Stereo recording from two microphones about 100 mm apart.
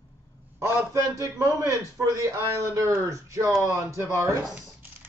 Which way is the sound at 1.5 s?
30° right (ahead or behind).